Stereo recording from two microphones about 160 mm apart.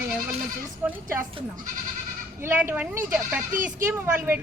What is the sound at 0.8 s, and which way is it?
Speech, 10° right (ahead or behind).